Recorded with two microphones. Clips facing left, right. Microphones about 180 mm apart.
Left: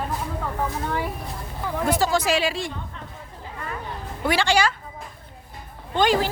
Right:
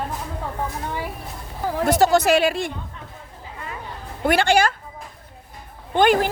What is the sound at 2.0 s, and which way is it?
Speech, 65° right (ahead or behind).